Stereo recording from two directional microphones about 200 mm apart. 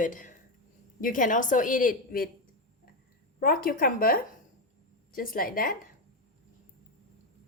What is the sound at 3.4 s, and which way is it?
Speech, 45° left (ahead or behind).